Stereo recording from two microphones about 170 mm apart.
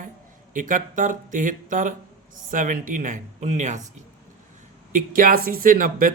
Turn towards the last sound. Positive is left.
turn(degrees=-55)  # may be behind; listen again after turning